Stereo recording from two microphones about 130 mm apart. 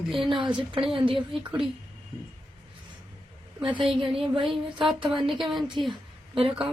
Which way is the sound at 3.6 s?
40° right (ahead or behind).